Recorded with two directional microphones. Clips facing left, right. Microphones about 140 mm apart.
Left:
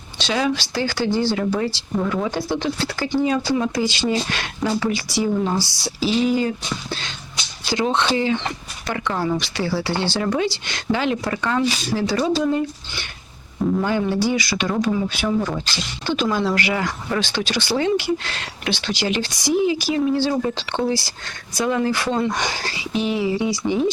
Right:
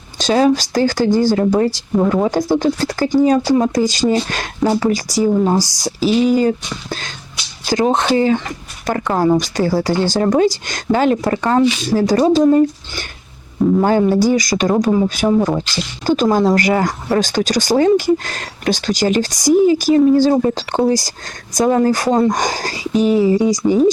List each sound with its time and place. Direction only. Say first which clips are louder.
0.2 s speech: right 8 dB; 40° right (ahead or behind)
7.7 s speech: right 5 dB; 45° right (ahead or behind)